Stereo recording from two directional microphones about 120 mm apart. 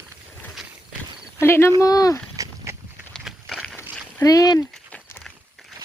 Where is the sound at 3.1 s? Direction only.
5° left (ahead or behind).